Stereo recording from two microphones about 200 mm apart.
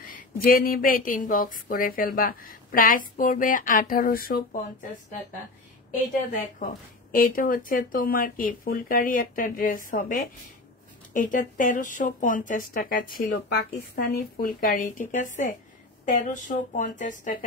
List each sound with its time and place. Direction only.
0.0 s speech: 45° left (ahead or behind)
6.6 s speech: 45° left (ahead or behind)